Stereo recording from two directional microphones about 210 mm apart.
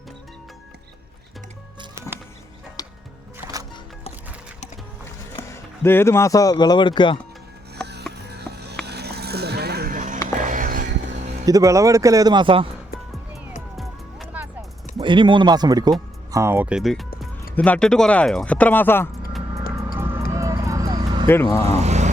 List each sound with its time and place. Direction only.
2.8 s music: 15° left (ahead or behind)
5.5 s speech: 10° left (ahead or behind)
8.1 s a sound: 50° right (ahead or behind)
10.4 s music: 40° right (ahead or behind)
11.1 s a sound: 35° right (ahead or behind)
11.4 s speech: 15° right (ahead or behind)
13.7 s music: centre (ahead or behind)
14.9 s speech: 20° right (ahead or behind); by 19.0 s 10° left (ahead or behind)
20.3 s vehicle: 15° right (ahead or behind)
21.2 s speech: 10° left (ahead or behind)
21.8 s vehicle: 35° right (ahead or behind)